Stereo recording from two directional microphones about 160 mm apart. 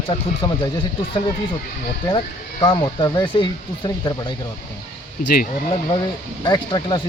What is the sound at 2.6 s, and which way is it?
Speech, 30° left (ahead or behind).